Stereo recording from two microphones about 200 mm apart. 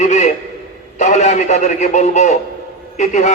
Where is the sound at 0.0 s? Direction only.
35° left (ahead or behind).